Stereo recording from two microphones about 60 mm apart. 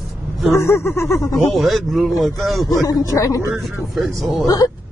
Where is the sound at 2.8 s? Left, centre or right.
Left.